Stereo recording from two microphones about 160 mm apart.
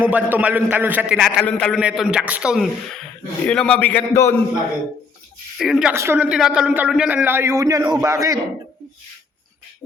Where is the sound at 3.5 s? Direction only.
5° left (ahead or behind).